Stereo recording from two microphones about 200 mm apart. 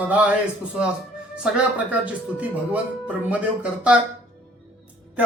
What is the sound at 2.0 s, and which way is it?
Speech, 5° right (ahead or behind).